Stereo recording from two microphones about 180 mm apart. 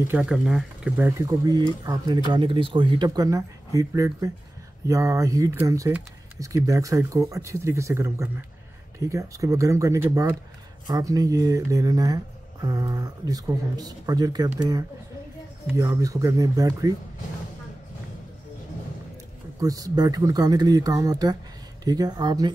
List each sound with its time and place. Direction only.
0.1 s speech: 5° right (ahead or behind); by 14.5 s 20° right (ahead or behind)
15.7 s speech: 20° right (ahead or behind)
19.6 s speech: 20° right (ahead or behind)